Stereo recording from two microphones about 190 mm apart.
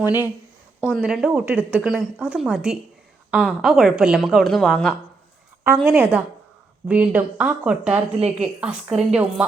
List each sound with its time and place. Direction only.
0.0 s speech: 10° right (ahead or behind)